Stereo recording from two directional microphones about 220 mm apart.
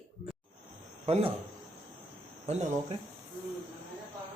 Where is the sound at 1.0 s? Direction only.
25° right (ahead or behind).